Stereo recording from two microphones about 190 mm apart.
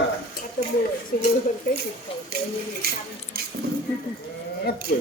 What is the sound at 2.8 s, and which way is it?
Speech, 55° right (ahead or behind).